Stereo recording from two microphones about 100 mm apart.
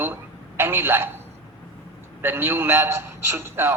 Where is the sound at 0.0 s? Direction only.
25° right (ahead or behind).